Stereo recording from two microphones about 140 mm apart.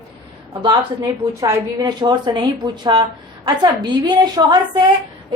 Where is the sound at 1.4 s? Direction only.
25° right (ahead or behind).